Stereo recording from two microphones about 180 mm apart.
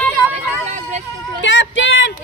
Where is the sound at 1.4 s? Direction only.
90° left.